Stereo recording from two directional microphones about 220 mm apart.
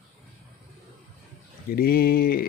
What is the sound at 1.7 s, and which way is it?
Speech, 45° left (ahead or behind).